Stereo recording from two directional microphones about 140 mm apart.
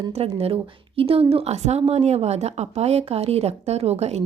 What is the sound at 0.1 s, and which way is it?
A woman's voice, 45° right (ahead or behind).